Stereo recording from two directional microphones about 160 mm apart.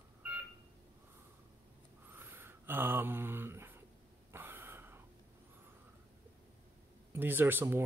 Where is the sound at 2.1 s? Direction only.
15° right (ahead or behind).